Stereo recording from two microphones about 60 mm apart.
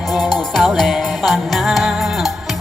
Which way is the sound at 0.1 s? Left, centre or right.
Centre.